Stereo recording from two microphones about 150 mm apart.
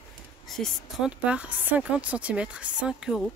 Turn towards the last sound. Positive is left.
turn(degrees=-5)  # may be behind; listen again after turning